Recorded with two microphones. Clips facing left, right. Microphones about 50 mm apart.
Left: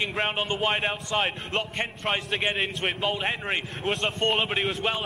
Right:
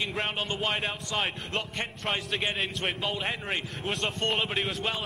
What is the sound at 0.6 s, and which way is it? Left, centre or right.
A man's voice, centre.